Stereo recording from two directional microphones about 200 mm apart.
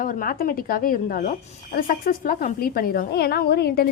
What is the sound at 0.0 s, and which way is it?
Speech, 45° left (ahead or behind).